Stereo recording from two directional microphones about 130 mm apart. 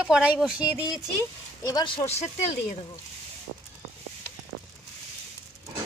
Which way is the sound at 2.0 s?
55° left (ahead or behind).